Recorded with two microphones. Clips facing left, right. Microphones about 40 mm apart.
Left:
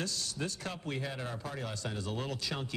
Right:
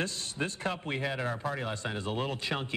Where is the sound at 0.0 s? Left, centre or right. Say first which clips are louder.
Right 3 dB; right.